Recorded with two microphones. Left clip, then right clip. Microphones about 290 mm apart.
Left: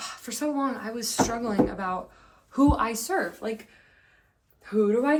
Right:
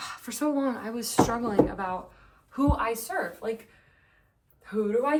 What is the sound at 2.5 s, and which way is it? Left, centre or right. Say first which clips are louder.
Speech: left 4 dB; centre.